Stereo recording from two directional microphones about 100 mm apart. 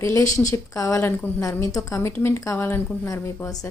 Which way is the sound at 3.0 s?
35° left (ahead or behind).